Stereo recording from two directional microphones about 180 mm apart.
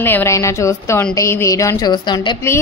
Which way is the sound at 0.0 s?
15° left (ahead or behind).